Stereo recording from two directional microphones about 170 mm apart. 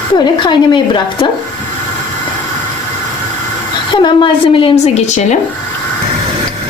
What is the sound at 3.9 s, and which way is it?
A woman's voice, 30° left (ahead or behind).